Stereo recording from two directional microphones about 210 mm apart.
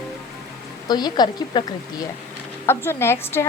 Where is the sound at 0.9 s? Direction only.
20° left (ahead or behind).